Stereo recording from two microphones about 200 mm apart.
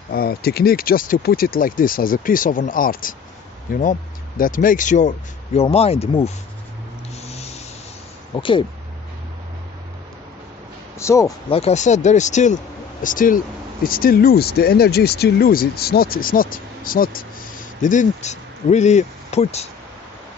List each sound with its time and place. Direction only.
0.1 s speech: 50° left (ahead or behind)
4.4 s speech: 45° left (ahead or behind)
7.2 s a sound: 30° left (ahead or behind)
8.4 s speech: 25° left (ahead or behind)
11.0 s a man's voice: 15° left (ahead or behind)
11.5 s speech: 35° left (ahead or behind)